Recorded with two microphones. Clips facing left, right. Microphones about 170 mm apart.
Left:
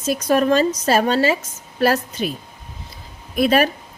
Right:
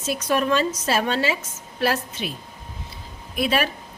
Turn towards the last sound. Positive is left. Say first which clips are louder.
# left 6 dB
turn(degrees=45)  # may be behind; listen again after turning